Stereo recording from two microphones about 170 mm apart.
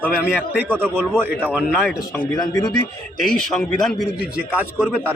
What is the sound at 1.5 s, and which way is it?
Speech, 5° right (ahead or behind).